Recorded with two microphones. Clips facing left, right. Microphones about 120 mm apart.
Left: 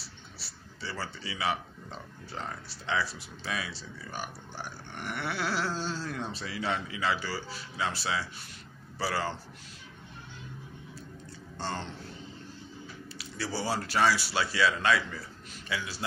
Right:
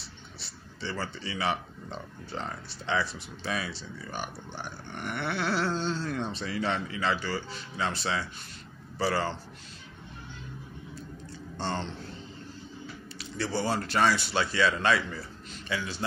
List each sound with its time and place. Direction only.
0.0 s a man's voice: 5° left (ahead or behind)
11.5 s speech: 5° left (ahead or behind)
13.2 s speech: 5° left (ahead or behind)